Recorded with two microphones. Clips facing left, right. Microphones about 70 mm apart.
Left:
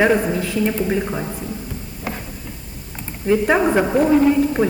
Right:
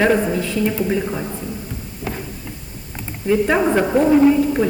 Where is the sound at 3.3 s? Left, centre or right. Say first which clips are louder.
Even; centre.